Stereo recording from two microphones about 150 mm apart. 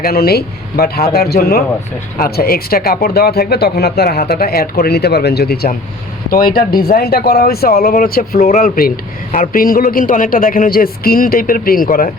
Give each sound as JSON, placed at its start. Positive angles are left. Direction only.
{"t": 0.0, "sound": "speech", "side_deg": 90}
{"t": 6.3, "sound": "speech", "side_deg": 75}
{"t": 8.4, "sound": "speech", "side_deg": 50}
{"t": 8.6, "sound": "speech", "side_deg": 80}
{"t": 9.3, "sound": "a man's voice", "side_deg": 65}